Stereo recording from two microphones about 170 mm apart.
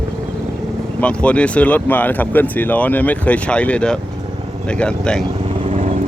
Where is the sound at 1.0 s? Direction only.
5° left (ahead or behind).